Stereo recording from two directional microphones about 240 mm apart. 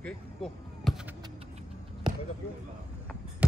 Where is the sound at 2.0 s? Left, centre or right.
Centre.